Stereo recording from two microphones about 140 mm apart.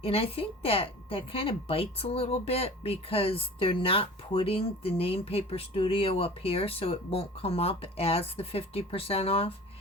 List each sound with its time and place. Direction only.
0.0 s speech: 45° left (ahead or behind)